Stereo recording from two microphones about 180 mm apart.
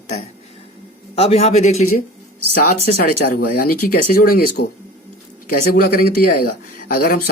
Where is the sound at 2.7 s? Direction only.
55° left (ahead or behind).